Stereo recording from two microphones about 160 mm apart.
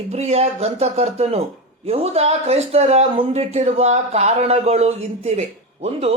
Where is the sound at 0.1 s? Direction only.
45° right (ahead or behind).